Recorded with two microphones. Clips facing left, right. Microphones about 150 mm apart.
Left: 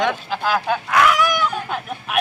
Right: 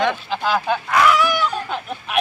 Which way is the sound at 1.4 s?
10° left (ahead or behind).